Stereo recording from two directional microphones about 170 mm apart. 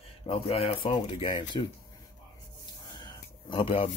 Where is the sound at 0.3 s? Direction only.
35° left (ahead or behind).